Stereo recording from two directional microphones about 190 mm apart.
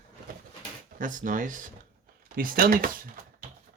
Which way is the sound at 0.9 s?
45° right (ahead or behind).